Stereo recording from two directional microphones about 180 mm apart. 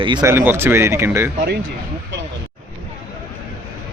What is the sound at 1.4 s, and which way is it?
Speech, 65° right (ahead or behind).